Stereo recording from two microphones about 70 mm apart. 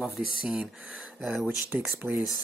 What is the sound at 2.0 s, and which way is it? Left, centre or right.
Speech, right.